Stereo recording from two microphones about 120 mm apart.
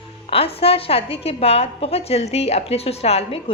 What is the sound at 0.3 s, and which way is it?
A woman's voice, 55° left (ahead or behind).